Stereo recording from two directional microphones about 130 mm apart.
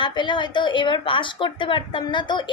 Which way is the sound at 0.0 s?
35° left (ahead or behind).